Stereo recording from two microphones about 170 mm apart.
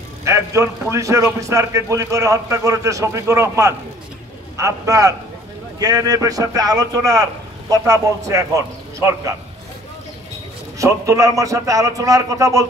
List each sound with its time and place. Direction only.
0.2 s a man's voice: 15° right (ahead or behind)
10.8 s a man's voice: 20° right (ahead or behind)